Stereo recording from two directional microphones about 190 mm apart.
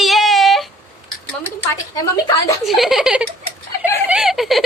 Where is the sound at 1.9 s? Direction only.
20° left (ahead or behind).